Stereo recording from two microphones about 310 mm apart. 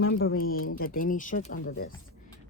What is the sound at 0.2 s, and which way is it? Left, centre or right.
Speech, left.